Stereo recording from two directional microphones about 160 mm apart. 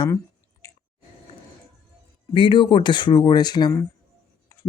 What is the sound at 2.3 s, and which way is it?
Speech, 30° left (ahead or behind).